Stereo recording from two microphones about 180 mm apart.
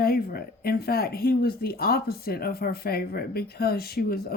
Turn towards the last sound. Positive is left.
turn(degrees=55)  # may be behind; listen again after turning